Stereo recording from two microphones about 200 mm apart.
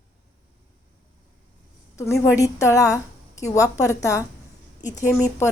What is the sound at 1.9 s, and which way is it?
A woman's voice, 15° left (ahead or behind).